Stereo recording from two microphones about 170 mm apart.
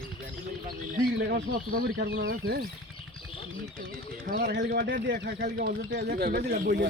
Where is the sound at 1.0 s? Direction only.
65° right (ahead or behind).